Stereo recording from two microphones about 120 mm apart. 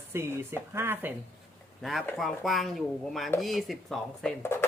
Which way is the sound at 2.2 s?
Centre (ahead or behind).